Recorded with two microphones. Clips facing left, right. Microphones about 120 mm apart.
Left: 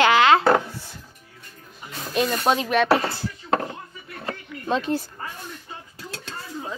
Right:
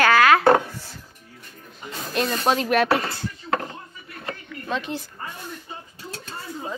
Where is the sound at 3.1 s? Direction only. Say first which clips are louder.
Left 2 dB; 25° left (ahead or behind).